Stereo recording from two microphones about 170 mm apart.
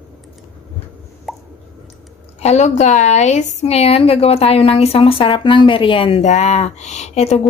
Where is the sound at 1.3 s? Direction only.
Centre (ahead or behind).